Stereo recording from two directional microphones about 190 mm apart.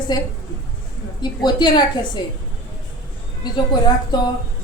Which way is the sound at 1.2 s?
20° left (ahead or behind).